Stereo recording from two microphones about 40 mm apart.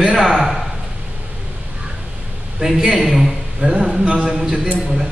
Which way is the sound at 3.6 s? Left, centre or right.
Centre.